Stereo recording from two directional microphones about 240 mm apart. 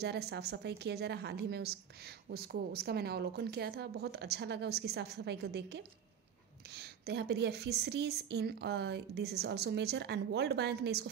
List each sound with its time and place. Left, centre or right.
0.0 s a woman's voice: right